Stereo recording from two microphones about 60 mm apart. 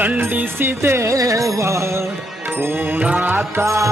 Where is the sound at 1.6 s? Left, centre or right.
Right.